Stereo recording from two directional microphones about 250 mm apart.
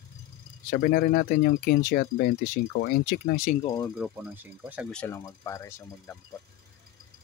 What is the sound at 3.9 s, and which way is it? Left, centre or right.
Speech, centre.